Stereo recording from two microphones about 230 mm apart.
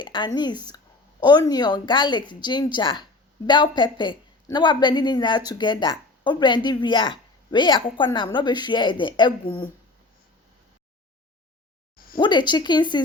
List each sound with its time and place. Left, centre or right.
0.0 s a woman's voice: centre
12.1 s a woman's voice: centre